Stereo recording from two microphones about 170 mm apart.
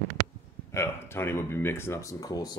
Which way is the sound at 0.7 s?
15° left (ahead or behind).